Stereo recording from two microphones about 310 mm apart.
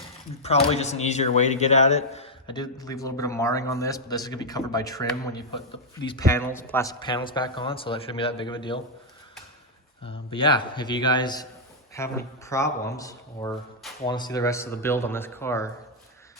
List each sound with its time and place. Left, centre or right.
0.4 s a man's voice: centre
10.0 s a man's voice: centre